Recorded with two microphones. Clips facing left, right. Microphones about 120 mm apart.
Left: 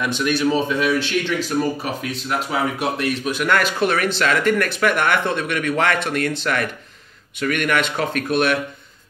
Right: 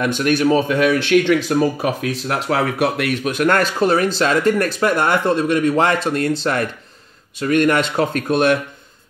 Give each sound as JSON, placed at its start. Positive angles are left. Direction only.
{"t": 0.0, "sound": "speech", "side_deg": -50}
{"t": 2.2, "sound": "speech", "side_deg": -70}